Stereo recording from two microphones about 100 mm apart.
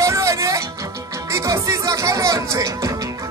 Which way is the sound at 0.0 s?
30° right (ahead or behind).